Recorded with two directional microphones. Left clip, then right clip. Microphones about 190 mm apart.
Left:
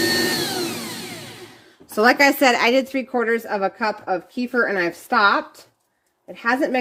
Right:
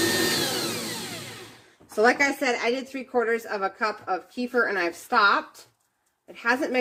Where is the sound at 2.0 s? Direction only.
55° left (ahead or behind).